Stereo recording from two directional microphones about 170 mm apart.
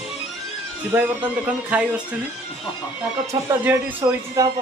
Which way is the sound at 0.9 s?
10° right (ahead or behind).